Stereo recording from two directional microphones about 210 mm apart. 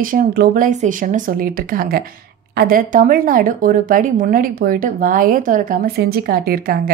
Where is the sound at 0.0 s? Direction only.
45° right (ahead or behind).